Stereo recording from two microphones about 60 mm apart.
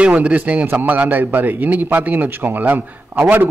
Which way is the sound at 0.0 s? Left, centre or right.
Centre.